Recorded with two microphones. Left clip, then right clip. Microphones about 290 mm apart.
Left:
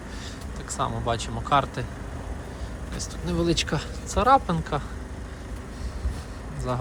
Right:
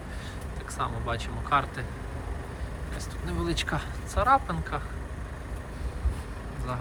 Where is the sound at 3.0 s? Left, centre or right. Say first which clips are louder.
Left 7 dB; centre.